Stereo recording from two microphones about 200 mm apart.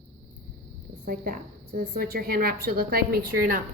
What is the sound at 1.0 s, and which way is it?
A woman's voice, 45° right (ahead or behind).